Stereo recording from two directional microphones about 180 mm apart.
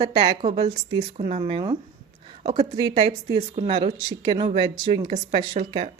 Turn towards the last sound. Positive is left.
turn(degrees=-35)  # may be behind; listen again after turning